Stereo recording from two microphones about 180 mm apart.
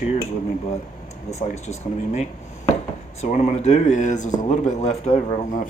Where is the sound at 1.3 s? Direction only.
40° left (ahead or behind).